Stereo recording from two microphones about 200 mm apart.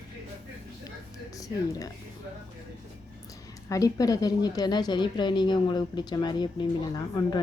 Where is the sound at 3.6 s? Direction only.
15° left (ahead or behind).